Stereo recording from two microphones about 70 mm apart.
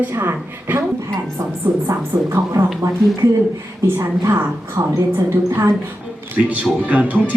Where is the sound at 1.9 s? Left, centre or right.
Right.